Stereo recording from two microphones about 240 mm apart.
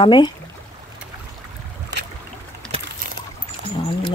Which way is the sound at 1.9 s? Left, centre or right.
Right.